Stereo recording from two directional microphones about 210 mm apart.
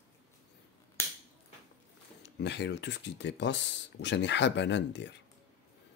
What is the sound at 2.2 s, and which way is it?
Speech, 55° left (ahead or behind).